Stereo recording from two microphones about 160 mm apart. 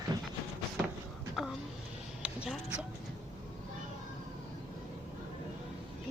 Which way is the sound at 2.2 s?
5° right (ahead or behind).